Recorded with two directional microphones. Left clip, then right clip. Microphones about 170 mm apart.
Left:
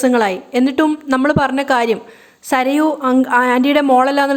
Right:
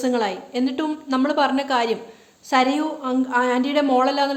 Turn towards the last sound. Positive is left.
turn(degrees=45)  # may be behind; listen again after turning